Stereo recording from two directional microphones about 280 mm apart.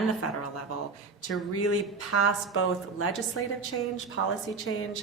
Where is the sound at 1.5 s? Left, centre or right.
Left.